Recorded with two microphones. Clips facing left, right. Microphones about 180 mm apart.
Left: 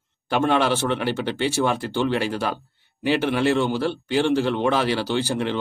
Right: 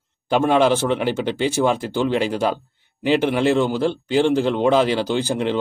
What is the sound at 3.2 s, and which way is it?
Speech, 50° right (ahead or behind).